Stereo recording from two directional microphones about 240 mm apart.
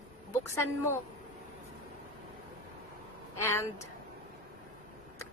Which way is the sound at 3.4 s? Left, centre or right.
Centre.